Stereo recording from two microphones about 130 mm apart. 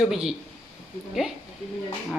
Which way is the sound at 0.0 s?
5° right (ahead or behind).